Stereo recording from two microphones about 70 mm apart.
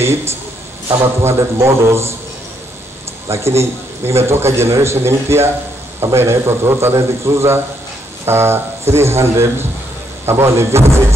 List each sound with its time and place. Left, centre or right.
0.0 s a man's voice: right
3.3 s a man's voice: right